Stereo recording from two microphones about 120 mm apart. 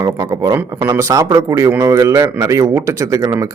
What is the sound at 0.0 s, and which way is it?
Speech, 25° right (ahead or behind).